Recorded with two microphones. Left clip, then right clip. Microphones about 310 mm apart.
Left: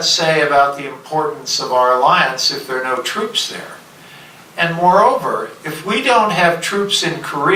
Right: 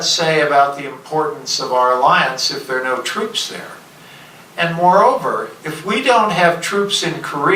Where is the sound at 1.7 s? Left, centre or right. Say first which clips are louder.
Left 1 dB; centre.